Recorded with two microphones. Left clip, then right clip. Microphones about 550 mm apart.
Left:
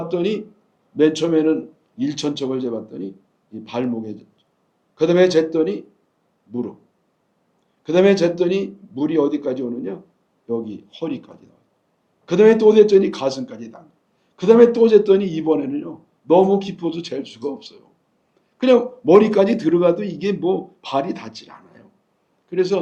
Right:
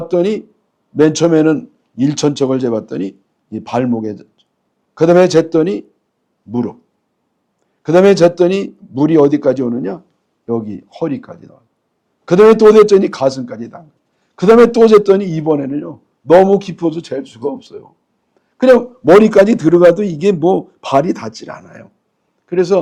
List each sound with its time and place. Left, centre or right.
0.1 s speech: right
7.9 s a man's voice: right
19.2 s a man's voice: right